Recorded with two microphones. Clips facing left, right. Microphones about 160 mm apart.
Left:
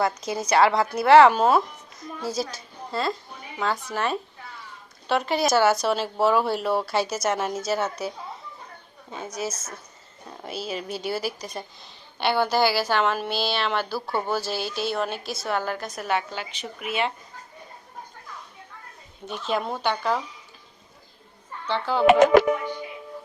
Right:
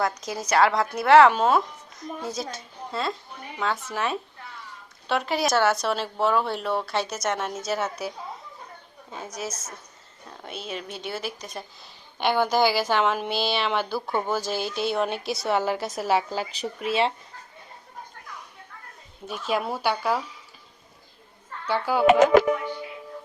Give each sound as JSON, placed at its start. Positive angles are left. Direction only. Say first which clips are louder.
{"t": 0.2, "sound": "speech", "louder": "left 1 dB", "side_deg": 0}
{"t": 9.1, "sound": "speech", "louder": "left 3 dB", "side_deg": 0}
{"t": 12.2, "sound": "a woman's voice", "louder": "even", "side_deg": -15}
{"t": 12.5, "sound": "speech", "louder": "even", "side_deg": 5}
{"t": 12.9, "sound": "a woman's voice", "louder": "even", "side_deg": -15}
{"t": 13.9, "sound": "speech", "louder": "even", "side_deg": 5}
{"t": 16.0, "sound": "speech", "louder": "right 3 dB", "side_deg": -30}
{"t": 19.3, "sound": "a woman's voice", "louder": "even", "side_deg": -5}
{"t": 21.7, "sound": "a woman's voice", "louder": "right 1 dB", "side_deg": -10}